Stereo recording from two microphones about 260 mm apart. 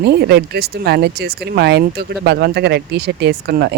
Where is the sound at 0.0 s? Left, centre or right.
Right.